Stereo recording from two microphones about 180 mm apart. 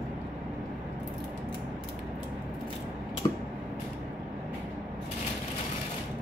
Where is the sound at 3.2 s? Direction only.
25° left (ahead or behind).